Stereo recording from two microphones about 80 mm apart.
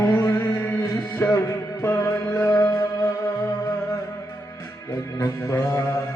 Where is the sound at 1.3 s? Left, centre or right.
Left.